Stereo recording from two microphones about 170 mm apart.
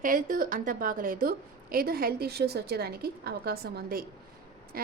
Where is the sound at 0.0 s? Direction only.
55° right (ahead or behind).